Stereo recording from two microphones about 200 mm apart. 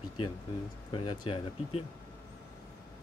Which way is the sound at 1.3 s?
30° left (ahead or behind).